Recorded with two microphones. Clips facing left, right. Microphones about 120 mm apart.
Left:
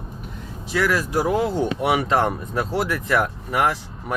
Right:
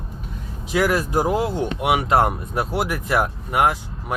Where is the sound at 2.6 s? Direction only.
20° right (ahead or behind).